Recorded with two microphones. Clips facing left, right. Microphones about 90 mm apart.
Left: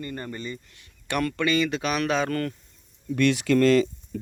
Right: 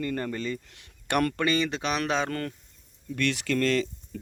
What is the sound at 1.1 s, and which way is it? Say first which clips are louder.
Speech: right 1 dB; 55° right (ahead or behind).